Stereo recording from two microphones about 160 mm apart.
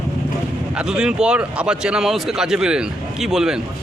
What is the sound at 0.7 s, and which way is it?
Speech, 5° right (ahead or behind).